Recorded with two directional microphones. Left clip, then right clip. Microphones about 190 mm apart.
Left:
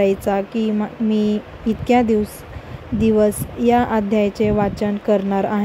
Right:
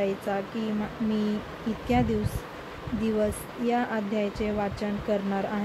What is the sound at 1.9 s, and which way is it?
A woman's voice, 55° left (ahead or behind).